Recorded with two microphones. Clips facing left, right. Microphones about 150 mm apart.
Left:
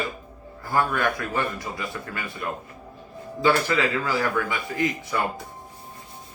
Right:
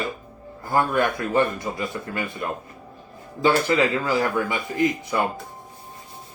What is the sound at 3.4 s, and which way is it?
A man's voice, 20° right (ahead or behind).